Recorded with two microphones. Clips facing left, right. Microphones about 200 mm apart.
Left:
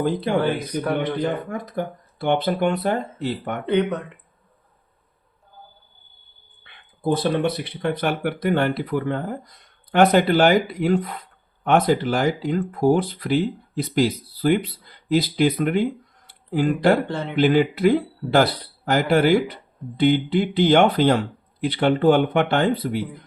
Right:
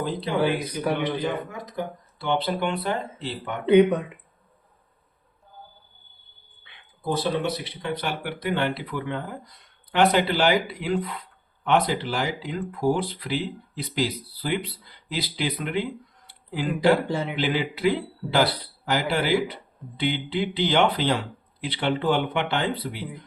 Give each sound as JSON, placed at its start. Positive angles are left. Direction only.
{"t": 0.0, "sound": "speech", "side_deg": 50}
{"t": 3.7, "sound": "speech", "side_deg": -10}
{"t": 6.7, "sound": "speech", "side_deg": 55}
{"t": 17.1, "sound": "speech", "side_deg": -10}
{"t": 17.3, "sound": "speech", "side_deg": 50}